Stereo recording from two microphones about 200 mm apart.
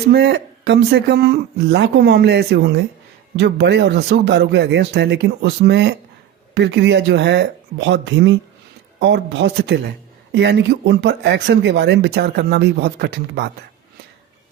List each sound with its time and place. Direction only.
0.1 s speech: 55° right (ahead or behind)